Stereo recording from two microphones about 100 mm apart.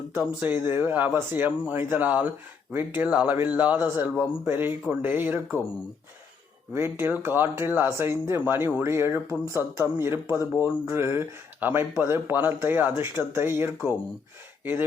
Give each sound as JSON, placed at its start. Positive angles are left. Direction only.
{"t": 0.2, "sound": "a man's voice", "side_deg": -20}
{"t": 6.7, "sound": "speech", "side_deg": -20}